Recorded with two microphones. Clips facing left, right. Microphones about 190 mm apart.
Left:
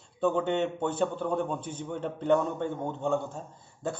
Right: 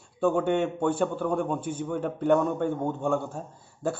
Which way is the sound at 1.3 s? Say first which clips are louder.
Right 3 dB; 10° right (ahead or behind).